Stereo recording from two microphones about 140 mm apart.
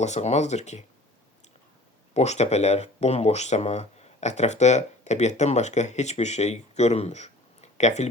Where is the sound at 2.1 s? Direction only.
55° left (ahead or behind).